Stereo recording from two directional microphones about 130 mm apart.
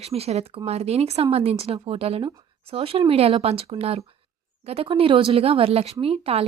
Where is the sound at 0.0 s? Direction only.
50° right (ahead or behind).